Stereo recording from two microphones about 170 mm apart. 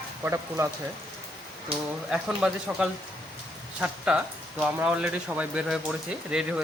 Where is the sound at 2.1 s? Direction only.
5° right (ahead or behind).